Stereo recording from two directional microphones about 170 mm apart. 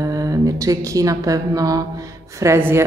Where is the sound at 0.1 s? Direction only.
20° right (ahead or behind).